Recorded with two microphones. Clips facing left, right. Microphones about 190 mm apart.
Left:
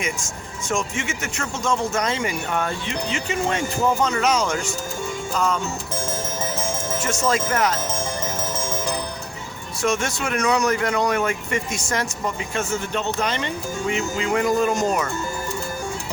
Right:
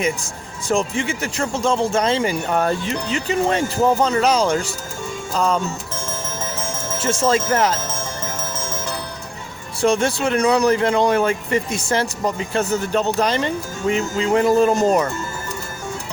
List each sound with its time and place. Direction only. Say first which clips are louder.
0.7 s speech: right 5 dB; 35° right (ahead or behind)
6.1 s music: even; 15° left (ahead or behind)
7.0 s music: right 5 dB; 30° right (ahead or behind)
7.9 s music: left 2 dB; 15° left (ahead or behind)
9.8 s speech: right 6 dB; 30° right (ahead or behind)